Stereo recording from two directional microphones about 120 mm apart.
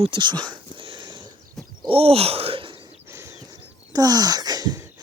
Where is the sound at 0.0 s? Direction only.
40° right (ahead or behind).